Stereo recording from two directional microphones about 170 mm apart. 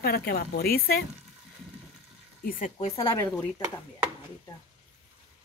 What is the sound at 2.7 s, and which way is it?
Speech, 30° left (ahead or behind).